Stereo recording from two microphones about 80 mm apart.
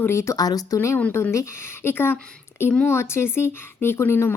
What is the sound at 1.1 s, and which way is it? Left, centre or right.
A woman's voice, left.